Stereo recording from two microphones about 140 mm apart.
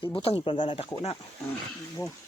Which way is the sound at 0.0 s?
40° left (ahead or behind).